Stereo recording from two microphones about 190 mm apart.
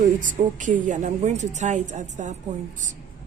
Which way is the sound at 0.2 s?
40° right (ahead or behind).